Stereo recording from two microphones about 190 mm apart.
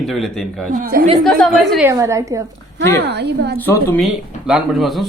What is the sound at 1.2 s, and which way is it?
Speech, centre (ahead or behind).